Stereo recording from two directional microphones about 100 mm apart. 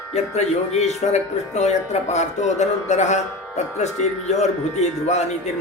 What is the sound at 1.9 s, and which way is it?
Speech, 90° left.